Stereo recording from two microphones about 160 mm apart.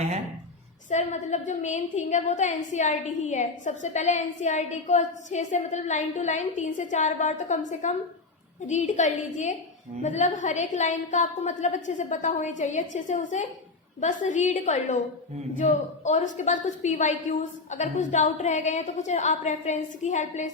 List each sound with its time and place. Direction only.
0.9 s a woman's voice: 50° left (ahead or behind)